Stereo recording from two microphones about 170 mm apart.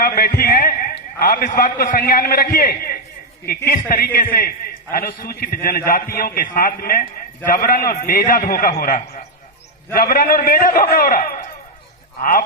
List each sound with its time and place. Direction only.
0.0 s a man's voice: 60° left (ahead or behind)